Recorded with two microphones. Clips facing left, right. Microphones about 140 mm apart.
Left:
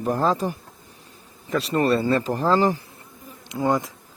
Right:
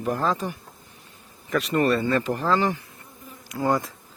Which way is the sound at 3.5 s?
20° left (ahead or behind).